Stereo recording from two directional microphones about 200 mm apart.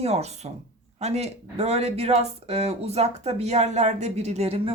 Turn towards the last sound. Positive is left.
turn(degrees=-30)  # may be behind; listen again after turning